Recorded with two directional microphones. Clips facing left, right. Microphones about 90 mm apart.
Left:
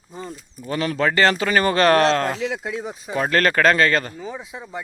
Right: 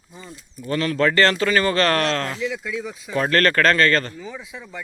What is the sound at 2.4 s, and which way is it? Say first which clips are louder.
Speech: left 1 dB; 55° left (ahead or behind).